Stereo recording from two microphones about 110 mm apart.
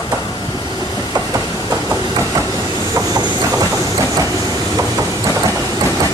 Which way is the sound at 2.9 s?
35° right (ahead or behind).